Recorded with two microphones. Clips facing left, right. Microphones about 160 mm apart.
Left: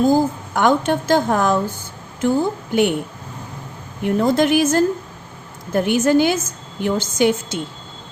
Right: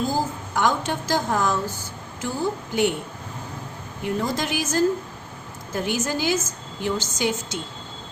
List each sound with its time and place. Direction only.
0.0 s a woman's voice: 55° left (ahead or behind)
4.0 s a woman's voice: 55° left (ahead or behind)